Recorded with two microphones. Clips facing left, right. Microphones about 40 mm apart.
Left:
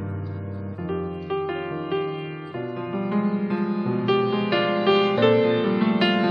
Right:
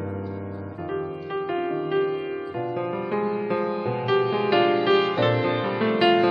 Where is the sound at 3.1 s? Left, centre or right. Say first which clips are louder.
Left 1 dB; centre.